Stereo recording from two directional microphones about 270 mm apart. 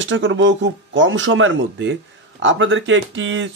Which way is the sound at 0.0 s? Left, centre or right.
Right.